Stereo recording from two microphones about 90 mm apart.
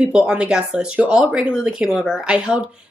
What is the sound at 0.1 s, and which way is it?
Speech, 10° right (ahead or behind).